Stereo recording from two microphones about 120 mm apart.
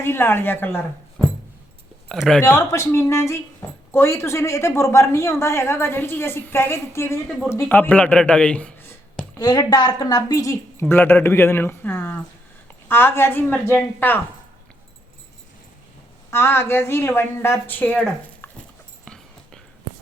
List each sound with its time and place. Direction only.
0.0 s a woman's voice: 20° left (ahead or behind)
2.0 s speech: centre (ahead or behind)
2.4 s a woman's voice: 20° left (ahead or behind)
7.3 s speech: 5° left (ahead or behind)
7.5 s a woman's voice: 20° left (ahead or behind)
9.4 s a woman's voice: 30° left (ahead or behind); by 14.2 s 15° left (ahead or behind)
16.3 s a woman's voice: 20° left (ahead or behind)